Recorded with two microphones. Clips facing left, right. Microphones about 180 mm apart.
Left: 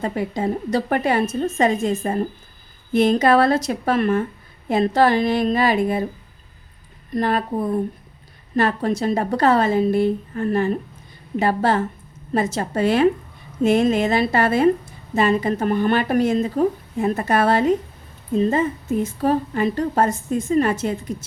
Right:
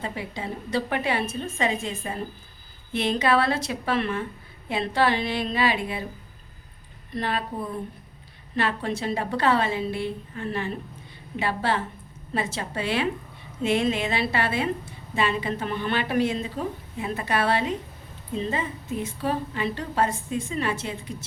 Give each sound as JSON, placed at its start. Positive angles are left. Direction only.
{"t": 0.0, "sound": "a woman's voice", "side_deg": 45}
{"t": 7.1, "sound": "a woman's voice", "side_deg": 45}
{"t": 8.5, "sound": "a woman's voice", "side_deg": 40}